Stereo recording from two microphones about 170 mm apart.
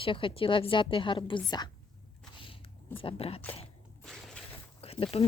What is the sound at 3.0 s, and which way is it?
Speech, 35° left (ahead or behind).